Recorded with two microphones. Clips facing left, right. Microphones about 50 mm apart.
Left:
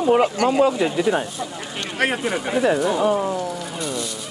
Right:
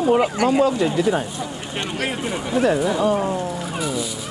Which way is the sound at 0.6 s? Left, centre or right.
Centre.